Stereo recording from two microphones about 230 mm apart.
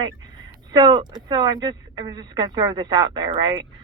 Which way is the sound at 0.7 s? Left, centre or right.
Centre.